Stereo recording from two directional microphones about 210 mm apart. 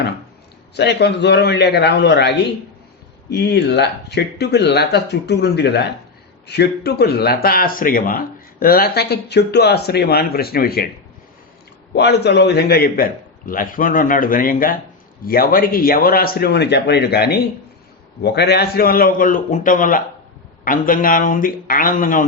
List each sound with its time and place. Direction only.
0.8 s speech: 55° left (ahead or behind)
3.3 s speech: 55° left (ahead or behind)
11.9 s a man's voice: 50° left (ahead or behind)